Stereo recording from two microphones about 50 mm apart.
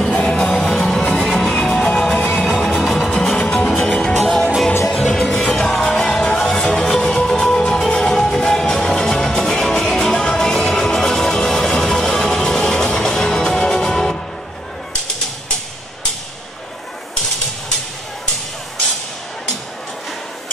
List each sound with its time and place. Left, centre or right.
0.1 s music: left
0.4 s music: centre
2.1 s music: left
2.8 s music: centre